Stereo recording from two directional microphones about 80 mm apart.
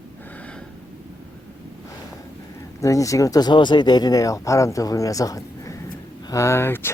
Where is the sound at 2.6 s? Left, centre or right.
Left.